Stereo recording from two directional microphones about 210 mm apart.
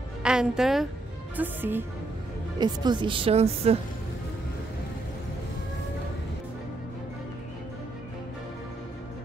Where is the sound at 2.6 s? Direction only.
20° right (ahead or behind).